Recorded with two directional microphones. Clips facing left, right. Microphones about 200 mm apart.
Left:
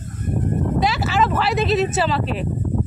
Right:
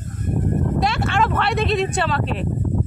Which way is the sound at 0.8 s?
5° left (ahead or behind).